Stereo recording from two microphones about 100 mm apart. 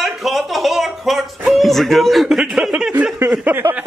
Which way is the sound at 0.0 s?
Centre (ahead or behind).